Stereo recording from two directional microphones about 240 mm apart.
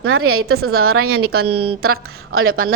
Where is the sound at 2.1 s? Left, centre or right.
Right.